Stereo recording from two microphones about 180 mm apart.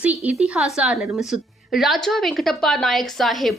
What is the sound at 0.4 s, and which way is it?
A woman's voice, 5° right (ahead or behind).